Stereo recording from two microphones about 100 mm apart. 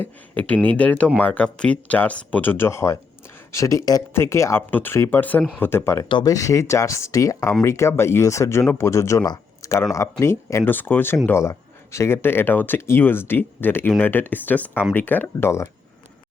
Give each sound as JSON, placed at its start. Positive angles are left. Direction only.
{"t": 0.0, "sound": "speech", "side_deg": 15}
{"t": 6.1, "sound": "speech", "side_deg": 50}
{"t": 6.3, "sound": "speech", "side_deg": 35}
{"t": 9.2, "sound": "a sound", "side_deg": 45}
{"t": 9.6, "sound": "speech", "side_deg": 35}